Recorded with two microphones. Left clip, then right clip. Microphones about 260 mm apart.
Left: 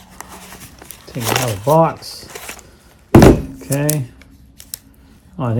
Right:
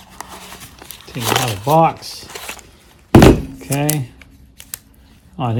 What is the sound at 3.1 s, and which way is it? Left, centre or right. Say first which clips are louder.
Thunk: even; centre.